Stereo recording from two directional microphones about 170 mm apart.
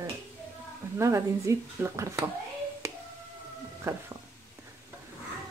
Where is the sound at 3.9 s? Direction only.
15° right (ahead or behind).